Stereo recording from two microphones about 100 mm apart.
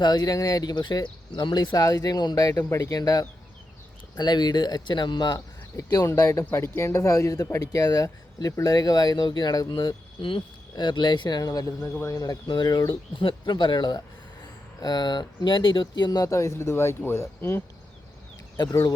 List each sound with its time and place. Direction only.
0.0 s speech: 45° left (ahead or behind)
6.1 s speech: 30° left (ahead or behind); by 9.9 s 45° left (ahead or behind)
10.2 s speech: 60° left (ahead or behind); by 17.6 s 25° left (ahead or behind)
18.5 s speech: 40° left (ahead or behind)